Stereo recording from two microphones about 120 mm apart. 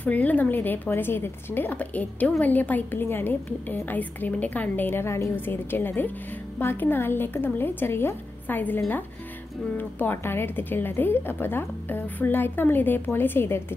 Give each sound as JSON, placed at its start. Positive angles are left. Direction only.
{"t": 0.0, "sound": "speech", "side_deg": 15}